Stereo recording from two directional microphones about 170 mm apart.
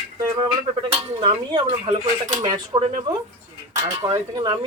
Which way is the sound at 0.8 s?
30° right (ahead or behind).